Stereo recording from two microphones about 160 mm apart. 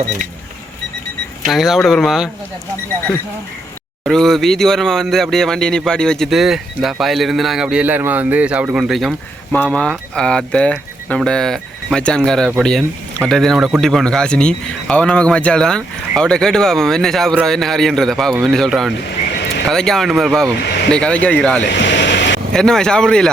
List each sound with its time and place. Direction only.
1.5 s speech: centre (ahead or behind)
4.0 s speech: centre (ahead or behind)
21.8 s vehicle: 90° left
22.5 s speech: 5° left (ahead or behind)